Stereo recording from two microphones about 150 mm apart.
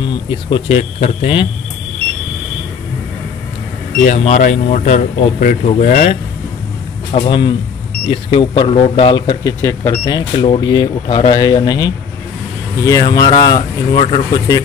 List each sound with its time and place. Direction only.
0.5 s speech: 40° left (ahead or behind)
4.2 s speech: 50° left (ahead or behind)
7.1 s speech: 35° left (ahead or behind)